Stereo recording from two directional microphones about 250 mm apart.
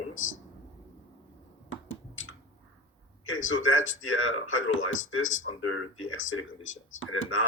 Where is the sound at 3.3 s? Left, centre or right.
Left.